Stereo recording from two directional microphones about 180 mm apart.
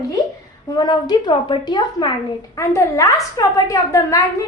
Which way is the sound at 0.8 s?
25° left (ahead or behind).